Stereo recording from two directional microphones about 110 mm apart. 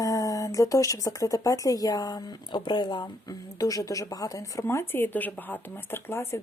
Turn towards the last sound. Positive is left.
turn(degrees=25)  # may be behind; listen again after turning